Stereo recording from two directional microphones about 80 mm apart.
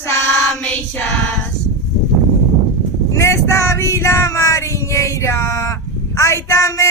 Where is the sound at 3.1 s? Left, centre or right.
Left.